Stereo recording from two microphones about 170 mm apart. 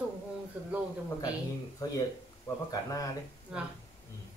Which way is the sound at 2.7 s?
20° left (ahead or behind).